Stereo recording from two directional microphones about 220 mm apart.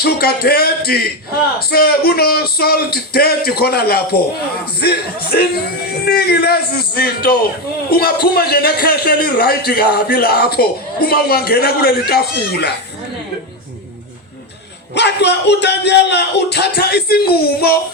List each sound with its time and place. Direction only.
0.0 s a man's voice: 45° left (ahead or behind)
14.9 s a man's voice: 50° left (ahead or behind)